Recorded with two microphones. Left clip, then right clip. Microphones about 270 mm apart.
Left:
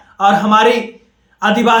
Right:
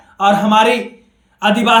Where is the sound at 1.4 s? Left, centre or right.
Centre.